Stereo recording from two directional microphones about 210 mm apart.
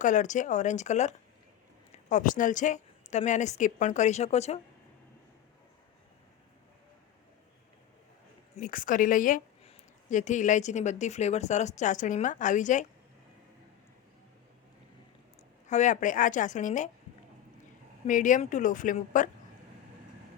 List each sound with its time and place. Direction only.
0.0 s speech: 35° left (ahead or behind)
8.5 s speech: 40° left (ahead or behind)
15.6 s speech: 35° left (ahead or behind)
18.0 s speech: 35° left (ahead or behind)